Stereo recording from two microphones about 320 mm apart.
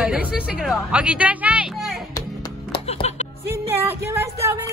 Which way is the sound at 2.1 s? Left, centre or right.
Centre.